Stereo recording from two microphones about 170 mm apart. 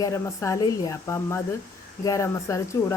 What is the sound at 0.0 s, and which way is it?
Speech, 20° left (ahead or behind).